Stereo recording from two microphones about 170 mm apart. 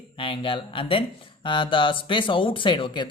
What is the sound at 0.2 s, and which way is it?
Speech, 30° left (ahead or behind).